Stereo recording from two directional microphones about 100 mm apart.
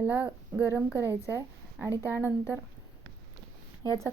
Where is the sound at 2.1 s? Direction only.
20° right (ahead or behind).